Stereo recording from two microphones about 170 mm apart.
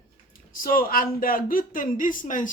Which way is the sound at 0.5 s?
55° left (ahead or behind).